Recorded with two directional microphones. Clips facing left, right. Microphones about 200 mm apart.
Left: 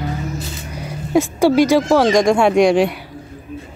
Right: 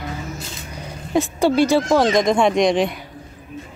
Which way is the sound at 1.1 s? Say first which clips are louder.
Left 4 dB; 10° left (ahead or behind).